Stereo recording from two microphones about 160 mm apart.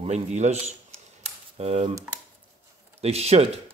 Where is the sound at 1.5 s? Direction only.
40° right (ahead or behind).